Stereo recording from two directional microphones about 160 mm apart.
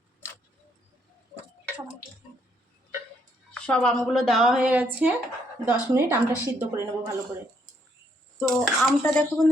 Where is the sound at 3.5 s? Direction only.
5° left (ahead or behind).